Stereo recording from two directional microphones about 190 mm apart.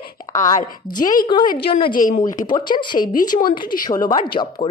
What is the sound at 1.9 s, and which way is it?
Speech, 45° left (ahead or behind).